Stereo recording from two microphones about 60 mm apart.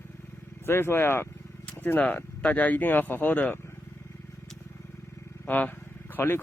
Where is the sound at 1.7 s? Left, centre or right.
Left.